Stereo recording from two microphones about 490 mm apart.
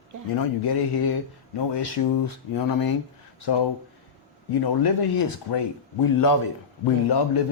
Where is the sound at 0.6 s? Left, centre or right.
Left.